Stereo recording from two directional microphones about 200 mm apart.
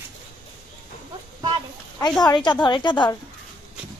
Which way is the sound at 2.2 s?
20° left (ahead or behind).